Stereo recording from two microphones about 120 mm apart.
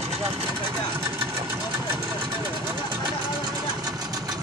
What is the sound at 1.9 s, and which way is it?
Vehicle, 20° right (ahead or behind).